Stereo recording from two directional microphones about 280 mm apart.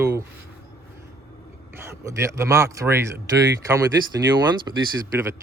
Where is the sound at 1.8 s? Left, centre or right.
Centre.